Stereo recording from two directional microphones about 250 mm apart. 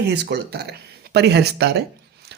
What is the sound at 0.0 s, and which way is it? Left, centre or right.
Speech, right.